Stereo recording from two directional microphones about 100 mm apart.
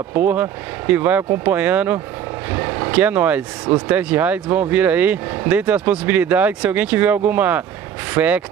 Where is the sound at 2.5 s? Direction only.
25° right (ahead or behind).